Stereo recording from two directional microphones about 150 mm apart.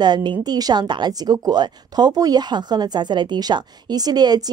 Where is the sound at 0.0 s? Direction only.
30° right (ahead or behind).